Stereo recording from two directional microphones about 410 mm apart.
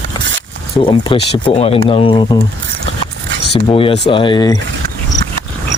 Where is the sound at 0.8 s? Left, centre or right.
Centre.